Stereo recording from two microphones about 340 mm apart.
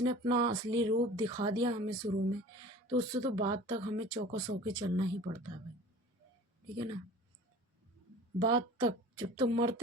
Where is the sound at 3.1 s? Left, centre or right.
Centre.